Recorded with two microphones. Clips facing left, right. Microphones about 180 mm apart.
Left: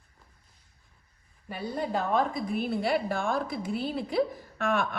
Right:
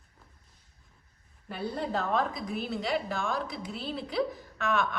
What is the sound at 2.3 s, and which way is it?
A woman's voice, 55° left (ahead or behind).